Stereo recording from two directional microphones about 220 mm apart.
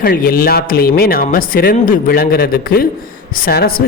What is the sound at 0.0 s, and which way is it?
Speech, 40° left (ahead or behind).